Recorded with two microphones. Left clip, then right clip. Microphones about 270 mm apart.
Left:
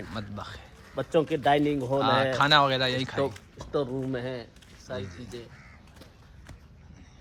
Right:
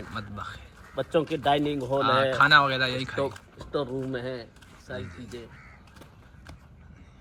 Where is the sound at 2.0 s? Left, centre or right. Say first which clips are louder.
Right 3 dB; centre.